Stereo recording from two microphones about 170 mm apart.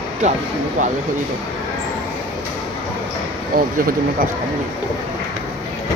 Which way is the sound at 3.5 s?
55° right (ahead or behind).